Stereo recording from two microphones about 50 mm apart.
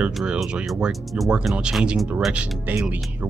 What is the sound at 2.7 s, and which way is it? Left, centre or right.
Speech, right.